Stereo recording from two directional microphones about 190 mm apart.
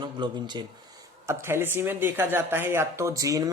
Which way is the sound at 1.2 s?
15° right (ahead or behind).